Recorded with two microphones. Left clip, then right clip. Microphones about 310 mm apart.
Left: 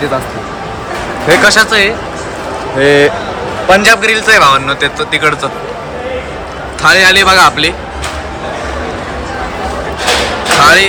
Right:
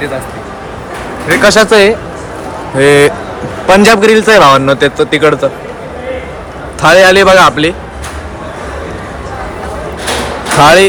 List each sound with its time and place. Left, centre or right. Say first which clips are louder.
1.4 s a man's voice: right 4 dB; centre
6.8 s a man's voice: right 2 dB; centre
10.6 s a man's voice: right 2 dB; centre